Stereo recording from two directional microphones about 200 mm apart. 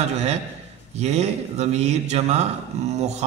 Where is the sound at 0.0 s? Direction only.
35° right (ahead or behind).